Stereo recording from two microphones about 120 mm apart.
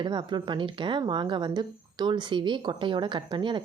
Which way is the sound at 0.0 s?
40° right (ahead or behind).